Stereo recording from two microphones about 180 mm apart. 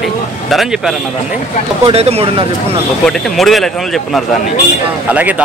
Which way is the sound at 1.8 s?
35° right (ahead or behind).